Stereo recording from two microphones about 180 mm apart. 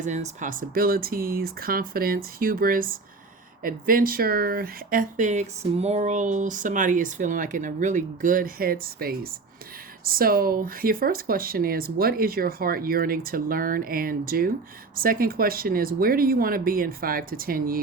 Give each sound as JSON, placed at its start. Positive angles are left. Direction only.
{"t": 0.0, "sound": "speech", "side_deg": -40}